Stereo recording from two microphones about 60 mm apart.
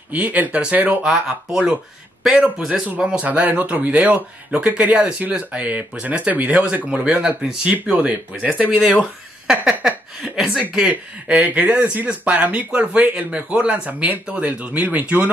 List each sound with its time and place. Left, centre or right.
0.1 s speech: right
9.5 s a sound: centre
10.2 s speech: centre
10.9 s speech: right